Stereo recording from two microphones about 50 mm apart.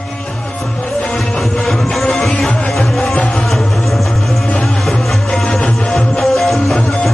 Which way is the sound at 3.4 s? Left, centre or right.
Centre.